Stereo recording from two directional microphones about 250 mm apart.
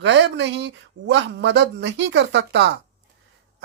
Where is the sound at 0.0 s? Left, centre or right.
Right.